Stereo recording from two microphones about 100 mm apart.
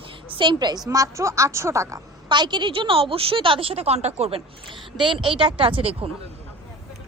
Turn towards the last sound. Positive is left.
turn(degrees=-65)  # may be behind; listen again after turning